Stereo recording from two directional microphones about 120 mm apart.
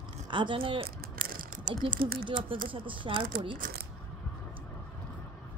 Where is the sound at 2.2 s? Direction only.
45° right (ahead or behind).